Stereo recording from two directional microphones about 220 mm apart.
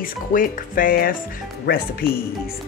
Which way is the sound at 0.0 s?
40° left (ahead or behind).